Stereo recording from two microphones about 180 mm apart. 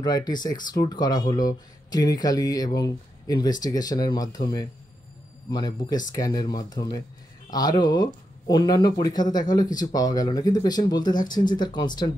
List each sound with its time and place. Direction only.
0.0 s speech: 20° left (ahead or behind)